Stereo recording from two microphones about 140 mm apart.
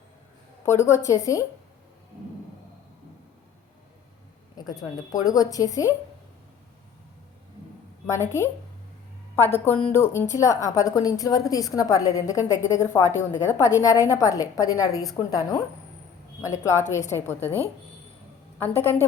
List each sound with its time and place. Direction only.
0.9 s a woman's voice: 20° left (ahead or behind)
4.5 s a woman's voice: 30° left (ahead or behind)
8.0 s a woman's voice: 20° left (ahead or behind)